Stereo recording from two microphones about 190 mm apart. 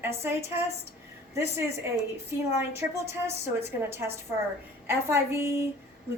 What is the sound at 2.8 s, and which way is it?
A woman's voice, 15° right (ahead or behind).